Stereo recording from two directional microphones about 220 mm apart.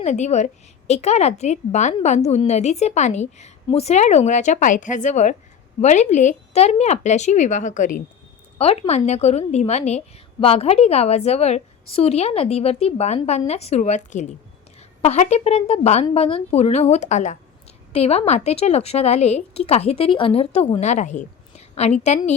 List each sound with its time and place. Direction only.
0.0 s a woman's voice: 30° left (ahead or behind)